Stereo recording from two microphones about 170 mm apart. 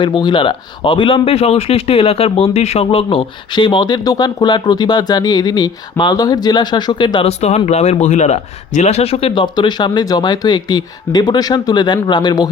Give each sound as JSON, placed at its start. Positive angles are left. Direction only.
{"t": 0.0, "sound": "speech", "side_deg": 25}